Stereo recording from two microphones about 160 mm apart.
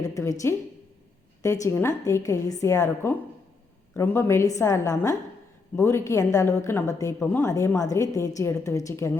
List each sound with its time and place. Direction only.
0.0 s a woman's voice: 20° left (ahead or behind)
1.6 s a woman's voice: 15° left (ahead or behind)